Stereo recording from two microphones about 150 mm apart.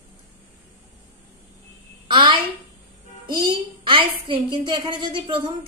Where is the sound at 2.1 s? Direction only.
30° right (ahead or behind).